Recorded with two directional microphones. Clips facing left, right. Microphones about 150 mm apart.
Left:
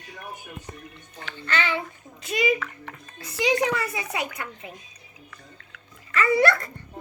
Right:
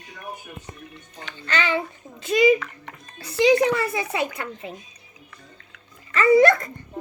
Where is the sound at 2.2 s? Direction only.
30° right (ahead or behind).